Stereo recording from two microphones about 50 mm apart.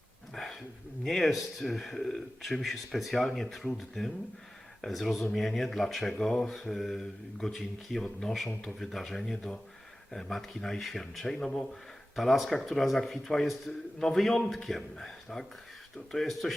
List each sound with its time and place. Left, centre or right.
0.3 s a sound: centre
1.0 s speech: centre
11.3 s speech: left
11.7 s speech: centre